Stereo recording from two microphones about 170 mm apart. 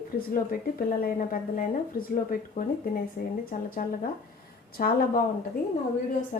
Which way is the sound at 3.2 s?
60° left (ahead or behind).